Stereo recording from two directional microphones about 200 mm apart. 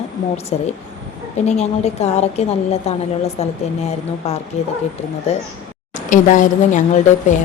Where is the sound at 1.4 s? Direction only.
35° left (ahead or behind).